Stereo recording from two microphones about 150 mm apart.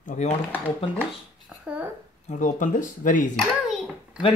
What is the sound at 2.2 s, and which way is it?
Speech, 55° left (ahead or behind).